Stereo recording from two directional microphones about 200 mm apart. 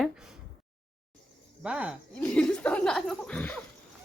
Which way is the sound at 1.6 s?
5° right (ahead or behind).